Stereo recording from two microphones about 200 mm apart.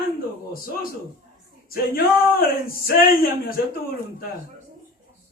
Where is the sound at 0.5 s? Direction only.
45° left (ahead or behind).